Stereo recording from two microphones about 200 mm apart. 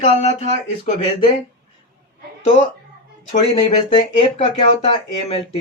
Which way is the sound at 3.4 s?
30° left (ahead or behind).